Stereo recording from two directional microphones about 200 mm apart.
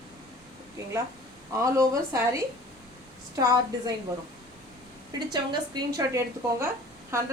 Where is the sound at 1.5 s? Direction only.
15° right (ahead or behind).